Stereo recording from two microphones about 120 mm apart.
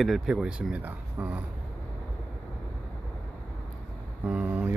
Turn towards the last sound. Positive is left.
turn(degrees=-15)  # may be behind; listen again after turning